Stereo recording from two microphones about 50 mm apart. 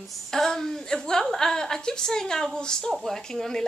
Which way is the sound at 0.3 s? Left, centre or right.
Centre.